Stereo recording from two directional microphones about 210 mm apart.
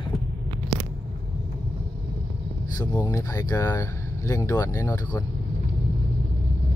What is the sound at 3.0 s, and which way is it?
Speech, 15° left (ahead or behind).